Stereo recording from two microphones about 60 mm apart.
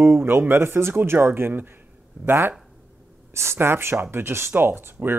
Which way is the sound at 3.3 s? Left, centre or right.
Right.